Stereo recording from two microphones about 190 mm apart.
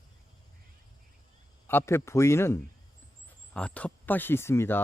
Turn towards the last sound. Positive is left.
turn(degrees=10)  # may be behind; listen again after turning